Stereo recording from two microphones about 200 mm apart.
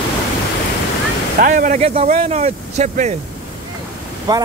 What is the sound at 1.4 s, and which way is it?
Speech, 40° right (ahead or behind).